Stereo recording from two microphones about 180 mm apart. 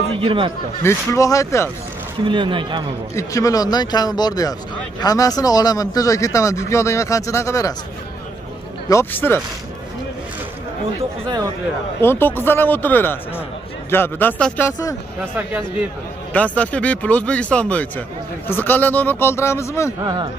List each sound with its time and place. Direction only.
0.1 s speech: 30° right (ahead or behind)
0.8 s speech: 15° left (ahead or behind)
2.2 s speech: 25° right (ahead or behind)
3.2 s speech: 15° left (ahead or behind)
8.8 s speech: 15° left (ahead or behind)
11.0 s speech: 25° right (ahead or behind)
12.0 s speech: 10° left (ahead or behind)
16.5 s speech: 5° left (ahead or behind)